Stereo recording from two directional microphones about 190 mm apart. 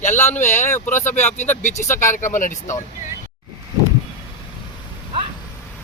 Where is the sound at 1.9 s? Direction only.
15° left (ahead or behind).